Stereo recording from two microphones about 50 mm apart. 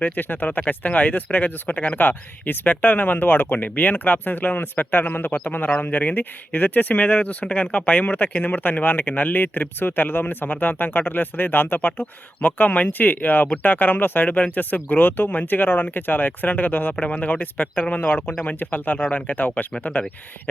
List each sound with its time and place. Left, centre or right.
0.0 s speech: left
2.0 s speech: left